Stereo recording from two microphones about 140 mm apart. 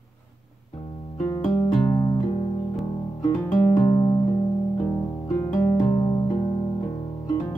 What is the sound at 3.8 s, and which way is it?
Music, 30° left (ahead or behind).